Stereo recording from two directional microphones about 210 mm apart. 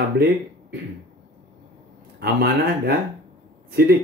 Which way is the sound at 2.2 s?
50° right (ahead or behind).